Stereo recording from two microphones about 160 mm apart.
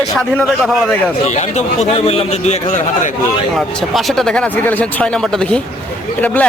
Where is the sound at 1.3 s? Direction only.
45° left (ahead or behind).